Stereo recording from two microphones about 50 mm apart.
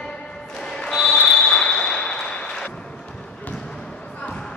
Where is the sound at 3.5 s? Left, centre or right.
Centre.